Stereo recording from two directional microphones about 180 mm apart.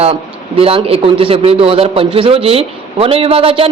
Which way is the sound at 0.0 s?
30° right (ahead or behind).